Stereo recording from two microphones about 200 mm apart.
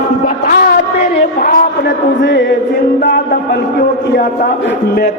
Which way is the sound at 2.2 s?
60° left (ahead or behind).